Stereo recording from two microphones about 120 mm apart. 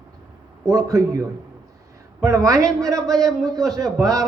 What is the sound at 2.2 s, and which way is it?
A man's voice, 30° right (ahead or behind).